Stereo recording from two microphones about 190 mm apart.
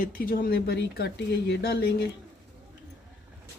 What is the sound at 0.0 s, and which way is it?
Speech, 50° left (ahead or behind).